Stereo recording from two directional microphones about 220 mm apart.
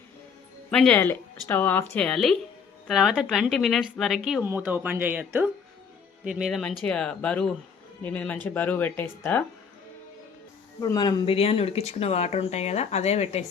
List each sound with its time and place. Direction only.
0.7 s speech: 5° left (ahead or behind)
10.8 s speech: 15° left (ahead or behind)